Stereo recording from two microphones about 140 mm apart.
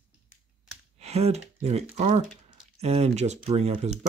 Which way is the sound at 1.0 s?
50° right (ahead or behind).